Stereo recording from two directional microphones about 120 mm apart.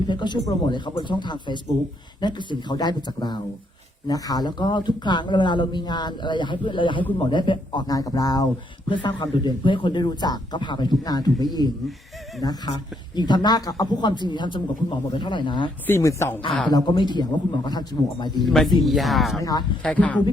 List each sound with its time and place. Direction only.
0.1 s speech: 40° left (ahead or behind)
15.9 s speech: 25° left (ahead or behind)
16.5 s speech: 10° left (ahead or behind)
16.7 s speech: 35° left (ahead or behind)
18.4 s speech: centre (ahead or behind)
19.4 s speech: 30° left (ahead or behind)
19.8 s speech: 10° left (ahead or behind)